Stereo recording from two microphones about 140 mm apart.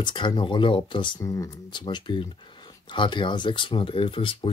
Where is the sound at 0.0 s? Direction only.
35° left (ahead or behind).